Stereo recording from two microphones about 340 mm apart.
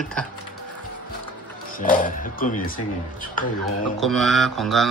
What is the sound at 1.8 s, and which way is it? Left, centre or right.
Speech, left.